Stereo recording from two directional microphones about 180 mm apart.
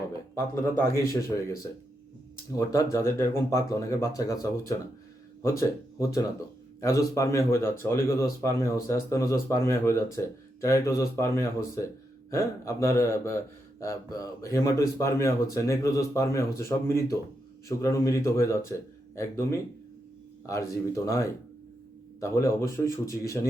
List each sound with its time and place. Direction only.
0.3 s speech: 15° left (ahead or behind)
2.6 s speech: 20° left (ahead or behind)
5.4 s speech: 15° left (ahead or behind)